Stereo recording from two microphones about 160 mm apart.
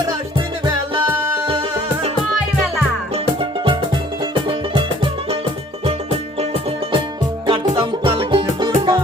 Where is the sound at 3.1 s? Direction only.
30° right (ahead or behind).